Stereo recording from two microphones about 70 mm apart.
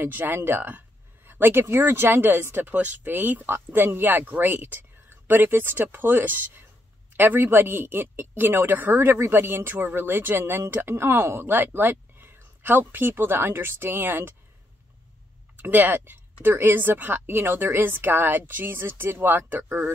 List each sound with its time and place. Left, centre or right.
0.0 s a woman's voice: right
15.5 s a woman's voice: right